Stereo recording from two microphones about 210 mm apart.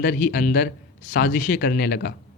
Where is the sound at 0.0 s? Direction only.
45° left (ahead or behind).